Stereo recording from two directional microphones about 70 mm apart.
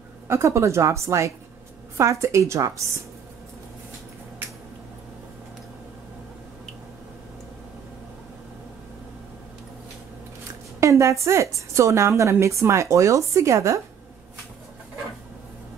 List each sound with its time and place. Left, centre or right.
0.3 s a woman's voice: right
10.8 s a woman's voice: right